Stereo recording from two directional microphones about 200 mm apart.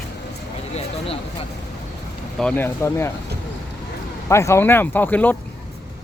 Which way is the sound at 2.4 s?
10° left (ahead or behind).